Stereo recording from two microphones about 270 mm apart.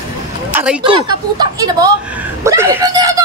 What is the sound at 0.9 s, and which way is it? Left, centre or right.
A man's voice, centre.